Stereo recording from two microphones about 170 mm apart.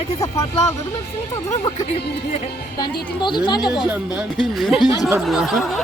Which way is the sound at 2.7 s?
25° left (ahead or behind).